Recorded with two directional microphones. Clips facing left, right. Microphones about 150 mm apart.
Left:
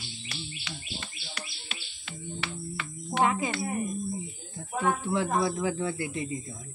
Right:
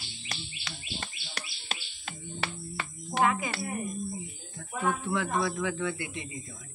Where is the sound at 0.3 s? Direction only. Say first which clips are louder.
Left 1 dB; 45° right (ahead or behind).